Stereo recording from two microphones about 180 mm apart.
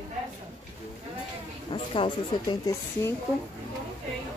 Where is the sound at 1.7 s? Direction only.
25° left (ahead or behind).